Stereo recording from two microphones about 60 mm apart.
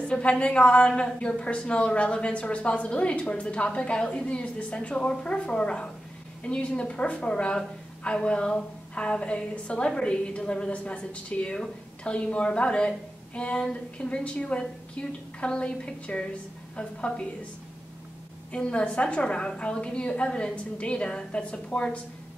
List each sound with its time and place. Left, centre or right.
0.1 s a woman's voice: centre
18.5 s a woman's voice: centre